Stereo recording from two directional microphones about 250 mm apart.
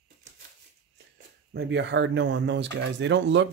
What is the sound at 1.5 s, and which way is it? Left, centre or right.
Speech, right.